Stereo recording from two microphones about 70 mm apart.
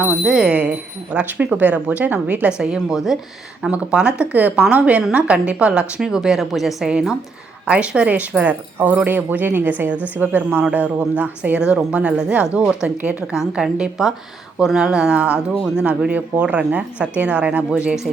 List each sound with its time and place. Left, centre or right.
0.3 s a woman's voice: centre
7.7 s a woman's voice: centre
13.3 s a woman's voice: centre
15.5 s speech: centre
15.8 s a woman's voice: centre